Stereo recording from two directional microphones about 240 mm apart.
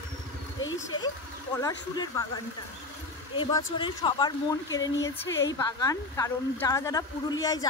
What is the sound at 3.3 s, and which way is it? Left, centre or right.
Speech, centre.